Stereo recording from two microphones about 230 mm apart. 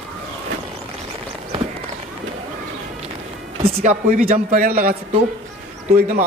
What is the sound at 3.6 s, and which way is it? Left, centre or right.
Speech, right.